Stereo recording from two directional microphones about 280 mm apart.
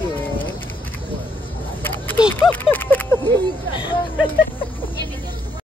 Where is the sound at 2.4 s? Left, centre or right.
Centre.